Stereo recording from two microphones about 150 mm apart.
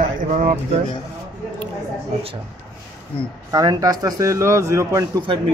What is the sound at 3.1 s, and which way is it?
Speech, 35° left (ahead or behind).